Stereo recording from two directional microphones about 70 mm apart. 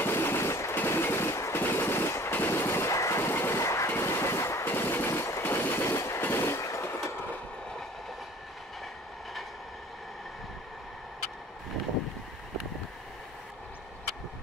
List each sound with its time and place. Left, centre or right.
0.0 s train: left
2.9 s train: left
3.2 s train: left